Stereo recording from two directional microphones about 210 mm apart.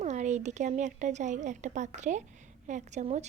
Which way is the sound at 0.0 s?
35° right (ahead or behind).